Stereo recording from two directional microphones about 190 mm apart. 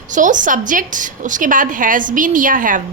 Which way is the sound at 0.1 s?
40° right (ahead or behind).